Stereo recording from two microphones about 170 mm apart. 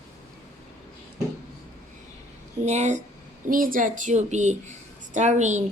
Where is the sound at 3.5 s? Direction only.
55° right (ahead or behind).